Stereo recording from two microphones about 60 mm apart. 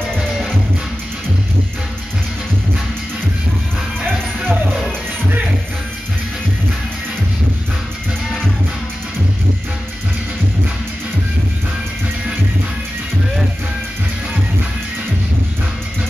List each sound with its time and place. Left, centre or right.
0.2 s music: centre
4.0 s music: right